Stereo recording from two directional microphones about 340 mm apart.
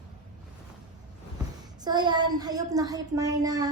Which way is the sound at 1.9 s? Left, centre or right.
Centre.